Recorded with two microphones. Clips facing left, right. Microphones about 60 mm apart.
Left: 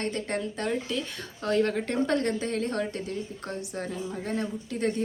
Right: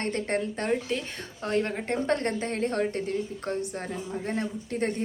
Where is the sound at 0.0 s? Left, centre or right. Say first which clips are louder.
Right 2 dB; right.